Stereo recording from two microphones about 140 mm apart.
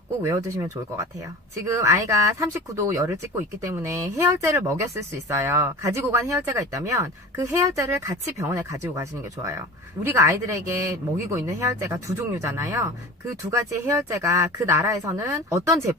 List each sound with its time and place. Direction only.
0.2 s speech: 20° right (ahead or behind)